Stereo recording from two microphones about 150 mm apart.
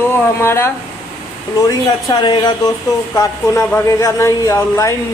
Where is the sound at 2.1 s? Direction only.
25° left (ahead or behind).